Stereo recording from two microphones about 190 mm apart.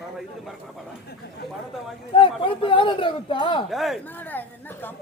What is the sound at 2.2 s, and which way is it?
Speech, 25° left (ahead or behind).